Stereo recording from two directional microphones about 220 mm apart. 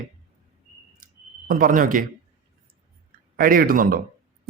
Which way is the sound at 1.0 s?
40° right (ahead or behind).